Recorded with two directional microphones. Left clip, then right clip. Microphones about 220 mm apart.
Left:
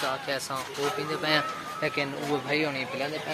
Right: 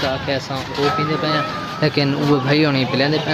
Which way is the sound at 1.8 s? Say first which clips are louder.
Right 11 dB; centre (ahead or behind).